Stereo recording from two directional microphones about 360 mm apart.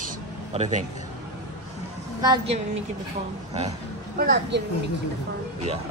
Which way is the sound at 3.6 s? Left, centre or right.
Right.